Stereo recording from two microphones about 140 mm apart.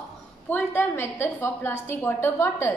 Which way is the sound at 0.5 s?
10° left (ahead or behind).